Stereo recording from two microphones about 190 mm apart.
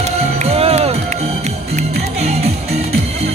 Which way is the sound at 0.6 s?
30° right (ahead or behind).